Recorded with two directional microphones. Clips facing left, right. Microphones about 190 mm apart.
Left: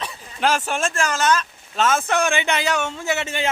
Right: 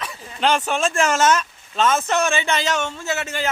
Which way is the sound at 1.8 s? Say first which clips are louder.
Right 1 dB; 10° left (ahead or behind).